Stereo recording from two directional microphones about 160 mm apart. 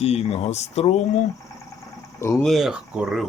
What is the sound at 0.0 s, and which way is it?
Speech, 40° left (ahead or behind).